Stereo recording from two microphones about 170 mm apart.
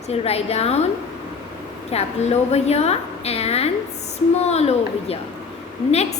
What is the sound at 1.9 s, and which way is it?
A woman's voice, 40° left (ahead or behind).